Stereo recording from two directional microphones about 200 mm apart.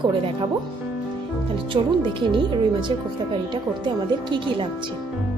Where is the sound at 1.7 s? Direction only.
25° right (ahead or behind).